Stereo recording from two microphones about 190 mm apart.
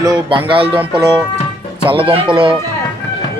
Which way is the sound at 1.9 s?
30° right (ahead or behind).